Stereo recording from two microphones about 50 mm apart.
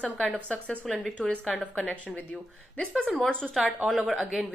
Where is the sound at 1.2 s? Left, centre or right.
Left.